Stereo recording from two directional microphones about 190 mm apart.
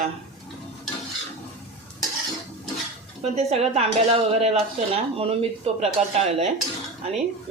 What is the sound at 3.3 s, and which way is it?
Speech, 35° right (ahead or behind).